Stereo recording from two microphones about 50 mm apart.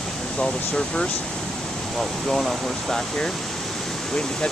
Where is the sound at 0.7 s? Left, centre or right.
Centre.